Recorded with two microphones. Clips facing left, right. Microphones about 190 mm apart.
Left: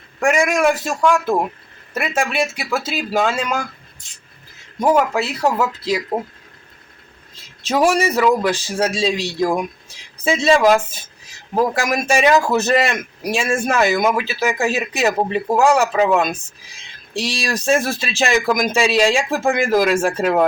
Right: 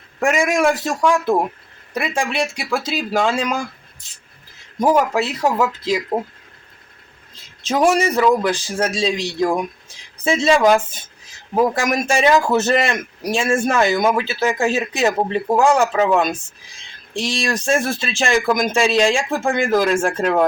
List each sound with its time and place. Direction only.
0.2 s a man's voice: centre (ahead or behind)
4.8 s a man's voice: 5° right (ahead or behind)
5.1 s speech: 15° right (ahead or behind)
6.1 s a man's voice: centre (ahead or behind)
7.7 s a man's voice: centre (ahead or behind)